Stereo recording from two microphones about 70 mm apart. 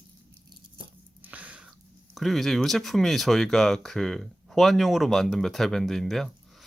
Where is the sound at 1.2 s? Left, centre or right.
Right.